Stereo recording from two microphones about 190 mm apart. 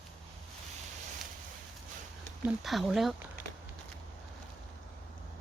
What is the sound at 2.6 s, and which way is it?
Speech, centre (ahead or behind).